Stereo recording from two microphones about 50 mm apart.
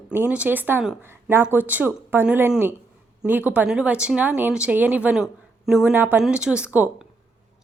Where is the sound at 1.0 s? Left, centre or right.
Right.